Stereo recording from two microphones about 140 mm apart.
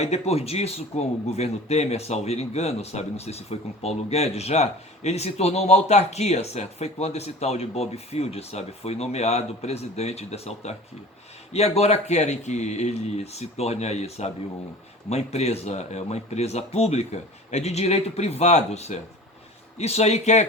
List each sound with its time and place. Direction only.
0.0 s a man's voice: 50° left (ahead or behind)